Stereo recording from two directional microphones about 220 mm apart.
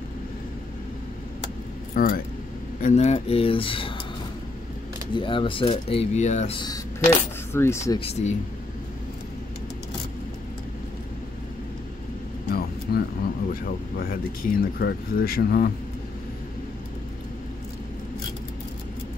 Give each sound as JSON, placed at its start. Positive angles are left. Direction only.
{"t": 2.0, "sound": "speech", "side_deg": 45}
{"t": 2.8, "sound": "speech", "side_deg": 30}
{"t": 5.1, "sound": "speech", "side_deg": 20}
{"t": 7.5, "sound": "speech", "side_deg": 10}
{"t": 8.0, "sound": "speech", "side_deg": 30}
{"t": 12.4, "sound": "a sound", "side_deg": 45}
{"t": 13.5, "sound": "speech", "side_deg": 40}